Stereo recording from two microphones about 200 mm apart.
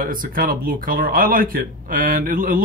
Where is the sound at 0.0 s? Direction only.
45° right (ahead or behind).